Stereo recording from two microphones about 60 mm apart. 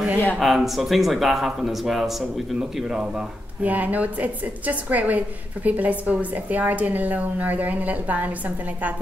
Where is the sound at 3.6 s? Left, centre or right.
Right.